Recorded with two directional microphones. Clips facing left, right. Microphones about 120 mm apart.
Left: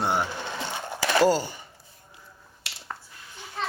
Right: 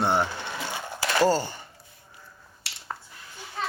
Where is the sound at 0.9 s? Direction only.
10° left (ahead or behind).